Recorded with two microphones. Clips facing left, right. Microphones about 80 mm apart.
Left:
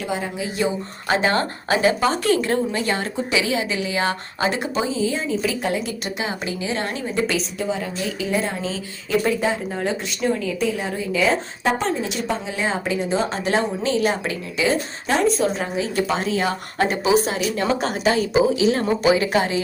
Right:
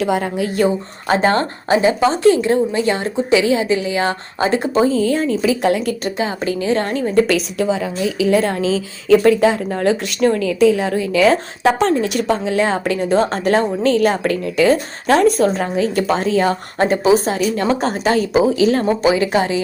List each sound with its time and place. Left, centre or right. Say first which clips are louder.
0.0 s speech: right 8 dB; right
1.0 s a woman's voice: right 5 dB; right
4.9 s speech: right 6 dB; right
6.1 s a woman's voice: right 6 dB; right
7.3 s a woman's voice: right 7 dB; right
9.8 s speech: right 8 dB; right
15.5 s a woman's voice: right 5 dB; right
19.0 s a woman's voice: right 1 dB; right